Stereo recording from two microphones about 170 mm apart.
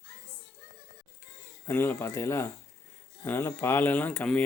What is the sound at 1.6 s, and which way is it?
Speech, 15° left (ahead or behind).